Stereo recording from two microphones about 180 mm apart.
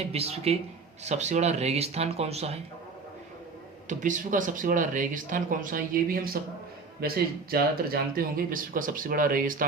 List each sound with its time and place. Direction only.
0.0 s speech: 35° right (ahead or behind)
3.8 s speech: 45° right (ahead or behind)
7.5 s speech: 55° right (ahead or behind)